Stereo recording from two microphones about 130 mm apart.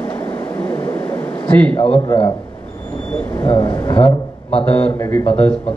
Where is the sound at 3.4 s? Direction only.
40° left (ahead or behind).